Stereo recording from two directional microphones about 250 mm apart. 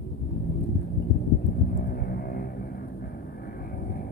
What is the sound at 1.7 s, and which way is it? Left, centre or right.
Music, left.